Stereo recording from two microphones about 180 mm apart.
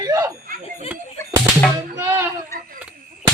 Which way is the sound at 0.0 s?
20° right (ahead or behind).